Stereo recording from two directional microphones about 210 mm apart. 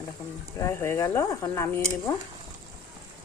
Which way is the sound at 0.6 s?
15° left (ahead or behind).